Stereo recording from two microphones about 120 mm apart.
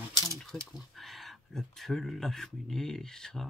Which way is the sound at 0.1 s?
30° left (ahead or behind).